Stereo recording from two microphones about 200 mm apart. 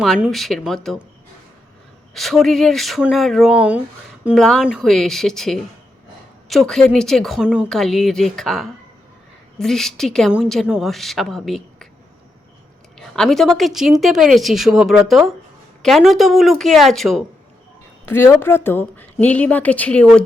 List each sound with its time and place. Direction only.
0.0 s speech: centre (ahead or behind)
2.1 s speech: centre (ahead or behind)
13.0 s speech: centre (ahead or behind)